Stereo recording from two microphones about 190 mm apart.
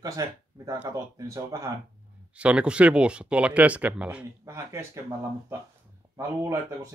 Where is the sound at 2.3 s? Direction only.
5° right (ahead or behind).